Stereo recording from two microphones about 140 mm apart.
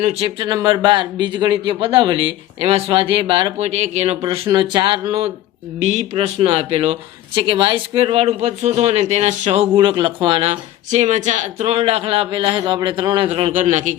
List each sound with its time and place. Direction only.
0.0 s speech: 50° right (ahead or behind)
0.3 s a man's voice: 30° right (ahead or behind); by 4.2 s 50° right (ahead or behind)
4.5 s a man's voice: 30° right (ahead or behind)
5.8 s speech: 55° right (ahead or behind)
9.7 s a man's voice: 35° right (ahead or behind)
13.6 s a man's voice: 60° right (ahead or behind)